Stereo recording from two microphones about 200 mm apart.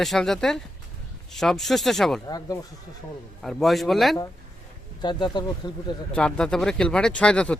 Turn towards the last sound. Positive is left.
turn(degrees=5)  # may be behind; listen again after turning